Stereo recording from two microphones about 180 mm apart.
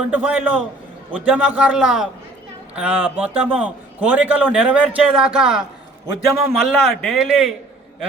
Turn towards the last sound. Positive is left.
turn(degrees=-5)  # may be behind; listen again after turning